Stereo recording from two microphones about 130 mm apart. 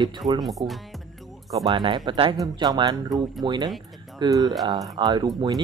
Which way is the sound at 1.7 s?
35° right (ahead or behind).